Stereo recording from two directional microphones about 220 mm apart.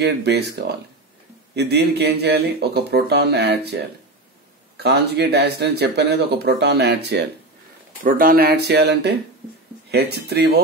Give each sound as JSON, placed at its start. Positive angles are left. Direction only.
{"t": 0.0, "sound": "speech", "side_deg": -50}